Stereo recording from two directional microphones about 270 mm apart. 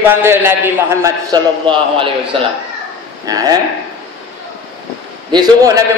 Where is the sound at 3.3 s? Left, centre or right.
Centre.